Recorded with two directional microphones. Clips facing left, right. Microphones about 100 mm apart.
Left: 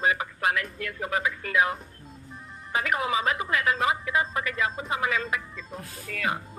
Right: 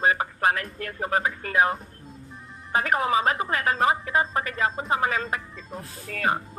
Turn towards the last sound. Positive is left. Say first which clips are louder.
# right 4 dB
turn(degrees=-35)  # may be behind; listen again after turning